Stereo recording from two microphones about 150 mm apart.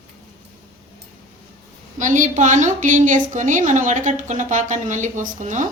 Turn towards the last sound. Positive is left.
turn(degrees=-55)  # may be behind; listen again after turning